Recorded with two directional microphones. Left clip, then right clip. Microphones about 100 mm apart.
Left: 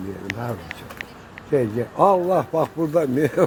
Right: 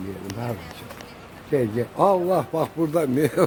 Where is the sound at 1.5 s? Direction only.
15° right (ahead or behind).